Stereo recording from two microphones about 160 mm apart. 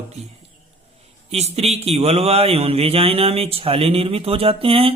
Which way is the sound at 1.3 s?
40° right (ahead or behind).